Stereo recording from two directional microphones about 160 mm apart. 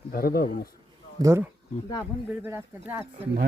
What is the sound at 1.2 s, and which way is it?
Speech, 15° right (ahead or behind).